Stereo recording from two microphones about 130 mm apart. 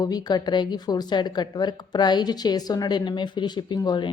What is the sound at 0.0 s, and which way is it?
A woman's voice, 30° left (ahead or behind).